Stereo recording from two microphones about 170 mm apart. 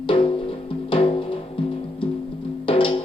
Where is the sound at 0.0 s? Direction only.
30° left (ahead or behind).